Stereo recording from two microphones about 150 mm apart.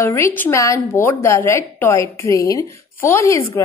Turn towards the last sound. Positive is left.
turn(degrees=20)  # may be behind; listen again after turning